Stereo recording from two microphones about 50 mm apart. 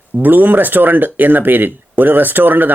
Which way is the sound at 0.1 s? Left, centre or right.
Right.